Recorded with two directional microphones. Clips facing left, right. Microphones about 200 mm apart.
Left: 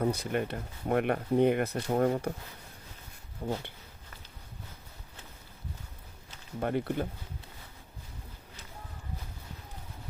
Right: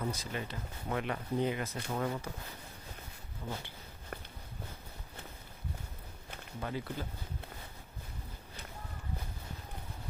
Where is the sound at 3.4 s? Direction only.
45° left (ahead or behind).